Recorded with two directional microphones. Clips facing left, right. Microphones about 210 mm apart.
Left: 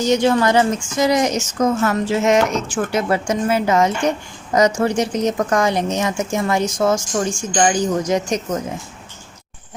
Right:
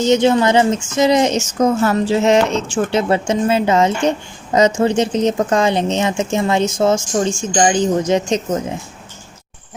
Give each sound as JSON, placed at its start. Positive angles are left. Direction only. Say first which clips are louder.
{"t": 0.0, "sound": "a woman's voice", "louder": "right 3 dB", "side_deg": -20}